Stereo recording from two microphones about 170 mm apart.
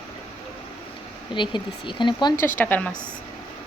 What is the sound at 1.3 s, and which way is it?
Speech, 30° left (ahead or behind).